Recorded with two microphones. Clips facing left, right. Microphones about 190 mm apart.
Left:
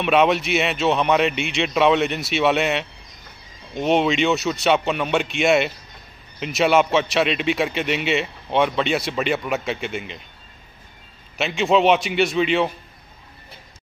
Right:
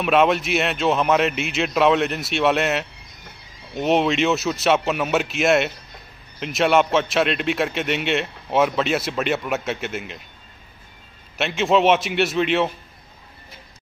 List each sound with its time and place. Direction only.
0.0 s a man's voice: centre (ahead or behind)
11.3 s a man's voice: centre (ahead or behind)